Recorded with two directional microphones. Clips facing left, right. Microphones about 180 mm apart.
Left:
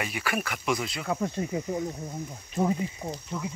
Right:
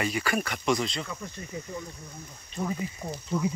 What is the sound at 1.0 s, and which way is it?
Speech, 80° left.